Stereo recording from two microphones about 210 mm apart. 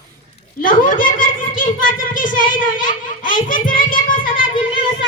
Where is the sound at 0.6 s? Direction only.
40° left (ahead or behind).